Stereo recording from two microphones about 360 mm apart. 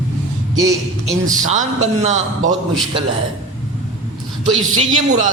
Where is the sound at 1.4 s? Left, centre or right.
Right.